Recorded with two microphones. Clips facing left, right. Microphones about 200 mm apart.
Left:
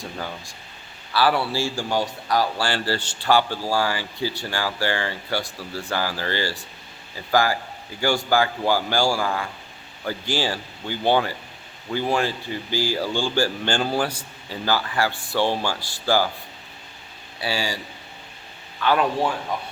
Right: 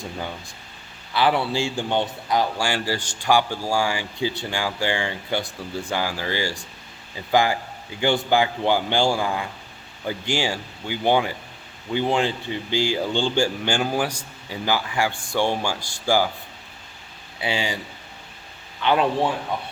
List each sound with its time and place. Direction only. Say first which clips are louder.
1.1 s a man's voice: even; 20° right (ahead or behind)
17.4 s speech: right 1 dB; 15° right (ahead or behind)
18.8 s a man's voice: right 1 dB; 20° right (ahead or behind)